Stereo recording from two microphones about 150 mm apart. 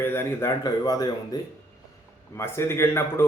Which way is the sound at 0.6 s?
25° left (ahead or behind).